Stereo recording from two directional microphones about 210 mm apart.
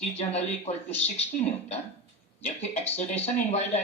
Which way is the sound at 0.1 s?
30° left (ahead or behind).